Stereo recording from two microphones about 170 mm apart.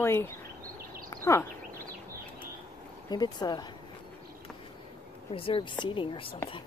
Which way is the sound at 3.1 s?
25° left (ahead or behind).